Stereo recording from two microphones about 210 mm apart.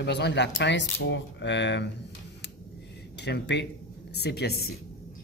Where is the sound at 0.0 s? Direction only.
55° left (ahead or behind).